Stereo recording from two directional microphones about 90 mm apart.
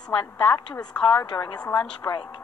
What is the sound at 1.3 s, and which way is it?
Speech, 50° left (ahead or behind).